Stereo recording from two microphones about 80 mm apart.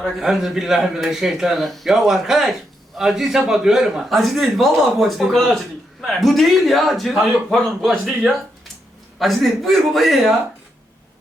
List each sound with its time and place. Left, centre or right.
0.2 s a man's voice: centre